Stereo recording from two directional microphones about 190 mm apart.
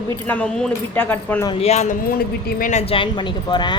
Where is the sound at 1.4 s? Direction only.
30° left (ahead or behind).